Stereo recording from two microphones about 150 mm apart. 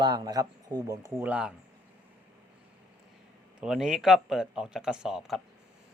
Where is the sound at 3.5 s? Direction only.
5° right (ahead or behind).